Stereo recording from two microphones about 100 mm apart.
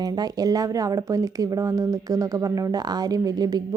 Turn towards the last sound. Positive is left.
turn(degrees=-40)  # may be behind; listen again after turning